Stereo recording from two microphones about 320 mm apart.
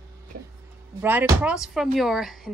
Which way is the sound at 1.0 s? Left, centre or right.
Centre.